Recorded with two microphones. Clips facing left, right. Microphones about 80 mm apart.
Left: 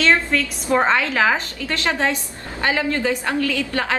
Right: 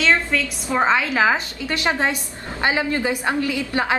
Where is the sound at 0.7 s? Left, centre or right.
Centre.